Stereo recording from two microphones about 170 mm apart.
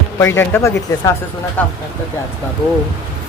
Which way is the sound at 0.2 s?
15° left (ahead or behind).